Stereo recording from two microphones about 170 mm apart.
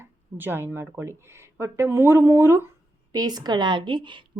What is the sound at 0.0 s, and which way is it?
A woman's voice, 10° right (ahead or behind).